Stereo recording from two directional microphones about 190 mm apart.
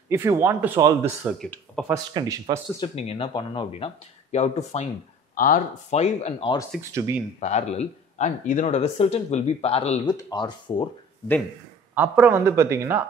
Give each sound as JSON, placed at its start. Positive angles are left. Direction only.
{"t": 0.1, "sound": "speech", "side_deg": -15}
{"t": 1.8, "sound": "speech", "side_deg": 5}
{"t": 2.1, "sound": "speech", "side_deg": -20}
{"t": 2.8, "sound": "speech", "side_deg": 30}
{"t": 6.8, "sound": "speech", "side_deg": -15}
{"t": 7.3, "sound": "speech", "side_deg": 35}
{"t": 11.9, "sound": "speech", "side_deg": -10}